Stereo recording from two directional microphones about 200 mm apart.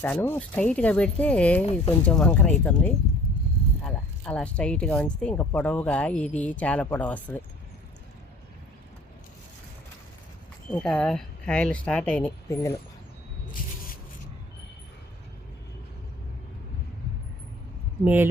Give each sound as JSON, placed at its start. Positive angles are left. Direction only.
{"t": 0.0, "sound": "speech", "side_deg": 10}
{"t": 10.7, "sound": "speech", "side_deg": 5}
{"t": 13.5, "sound": "a sound", "side_deg": 45}
{"t": 18.0, "sound": "speech", "side_deg": -10}